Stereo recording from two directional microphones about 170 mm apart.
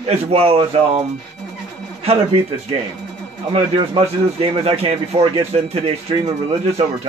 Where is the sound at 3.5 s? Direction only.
35° right (ahead or behind).